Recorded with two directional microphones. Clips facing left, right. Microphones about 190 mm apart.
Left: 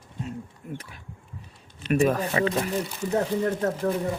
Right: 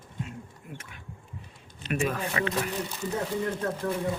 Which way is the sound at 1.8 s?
35° left (ahead or behind).